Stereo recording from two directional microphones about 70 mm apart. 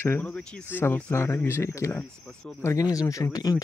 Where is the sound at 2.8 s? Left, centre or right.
Left.